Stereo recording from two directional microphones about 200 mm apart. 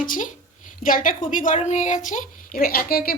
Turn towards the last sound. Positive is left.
turn(degrees=50)  # may be behind; listen again after turning